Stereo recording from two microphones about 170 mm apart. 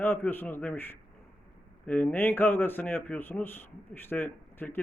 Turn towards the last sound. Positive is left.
turn(degrees=10)  # may be behind; listen again after turning